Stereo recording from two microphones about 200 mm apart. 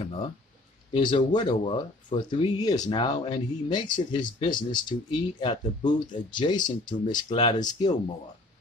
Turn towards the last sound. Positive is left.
turn(degrees=20)  # may be behind; listen again after turning